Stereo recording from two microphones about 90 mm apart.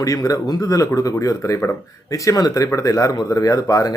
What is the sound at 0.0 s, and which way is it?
A man's voice, 40° left (ahead or behind).